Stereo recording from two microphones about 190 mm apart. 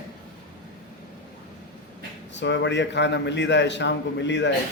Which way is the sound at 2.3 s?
65° left (ahead or behind).